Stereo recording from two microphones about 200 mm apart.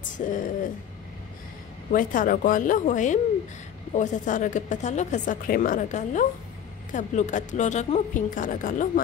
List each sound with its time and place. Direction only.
0.2 s a woman's voice: 40° left (ahead or behind)
1.9 s a woman's voice: 45° left (ahead or behind)